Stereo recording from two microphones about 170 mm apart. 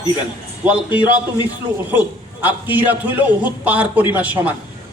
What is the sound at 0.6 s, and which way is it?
A man's voice, 10° right (ahead or behind).